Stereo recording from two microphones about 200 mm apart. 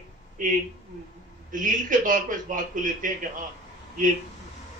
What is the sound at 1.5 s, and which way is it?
A man's voice, 40° right (ahead or behind).